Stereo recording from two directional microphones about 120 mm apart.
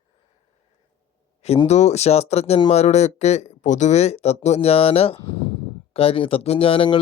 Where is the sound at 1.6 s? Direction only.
70° left (ahead or behind); by 7.0 s 50° left (ahead or behind).